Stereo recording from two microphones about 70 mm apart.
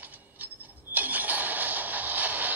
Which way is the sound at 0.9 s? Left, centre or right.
Right.